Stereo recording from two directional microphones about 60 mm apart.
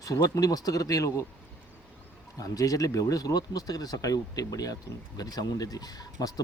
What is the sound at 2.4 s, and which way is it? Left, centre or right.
Speech, left.